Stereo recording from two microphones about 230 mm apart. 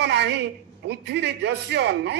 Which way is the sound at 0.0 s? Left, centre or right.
Right.